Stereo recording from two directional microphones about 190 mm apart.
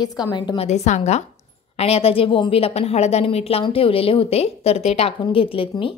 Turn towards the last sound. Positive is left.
turn(degrees=30)  # may be behind; listen again after turning